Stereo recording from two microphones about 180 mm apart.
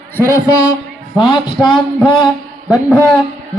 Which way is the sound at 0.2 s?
15° left (ahead or behind).